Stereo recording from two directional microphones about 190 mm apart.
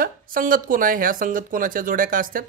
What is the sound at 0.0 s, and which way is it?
Speech, 50° right (ahead or behind).